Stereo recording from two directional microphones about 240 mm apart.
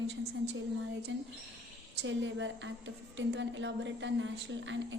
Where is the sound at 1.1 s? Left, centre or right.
Right.